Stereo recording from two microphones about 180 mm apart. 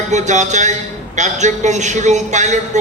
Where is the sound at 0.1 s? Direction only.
40° right (ahead or behind).